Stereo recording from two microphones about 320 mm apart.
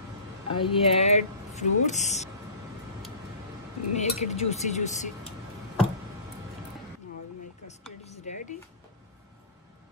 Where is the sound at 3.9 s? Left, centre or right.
Left.